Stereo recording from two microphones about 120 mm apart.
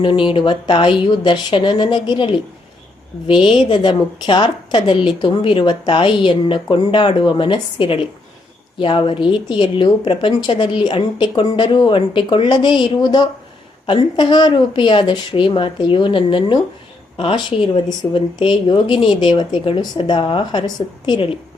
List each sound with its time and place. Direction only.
0.0 s a woman's voice: 45° left (ahead or behind)